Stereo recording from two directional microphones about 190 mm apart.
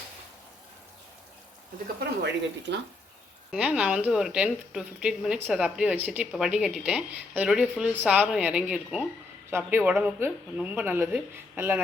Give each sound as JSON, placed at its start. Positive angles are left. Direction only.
{"t": 2.2, "sound": "speech", "side_deg": -65}
{"t": 3.5, "sound": "speech", "side_deg": -5}